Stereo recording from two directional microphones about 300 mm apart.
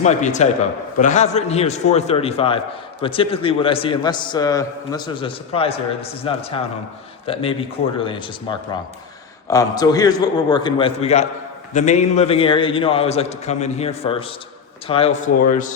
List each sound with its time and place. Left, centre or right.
0.0 s a man's voice: left